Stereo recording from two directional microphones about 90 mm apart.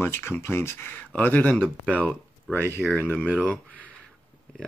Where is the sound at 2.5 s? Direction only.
25° right (ahead or behind).